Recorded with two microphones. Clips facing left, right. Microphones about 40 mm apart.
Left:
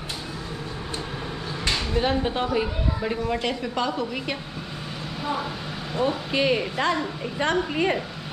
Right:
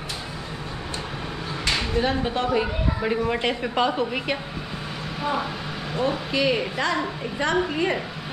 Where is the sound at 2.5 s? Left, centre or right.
Centre.